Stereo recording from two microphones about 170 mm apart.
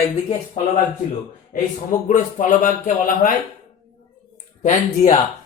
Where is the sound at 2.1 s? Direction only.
50° left (ahead or behind).